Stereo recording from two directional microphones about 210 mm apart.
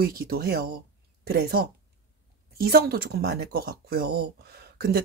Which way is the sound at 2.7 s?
50° right (ahead or behind).